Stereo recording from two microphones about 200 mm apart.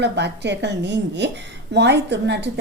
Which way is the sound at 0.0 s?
60° right (ahead or behind).